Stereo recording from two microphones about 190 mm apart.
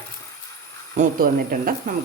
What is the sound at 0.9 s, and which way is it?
Speech, 50° right (ahead or behind).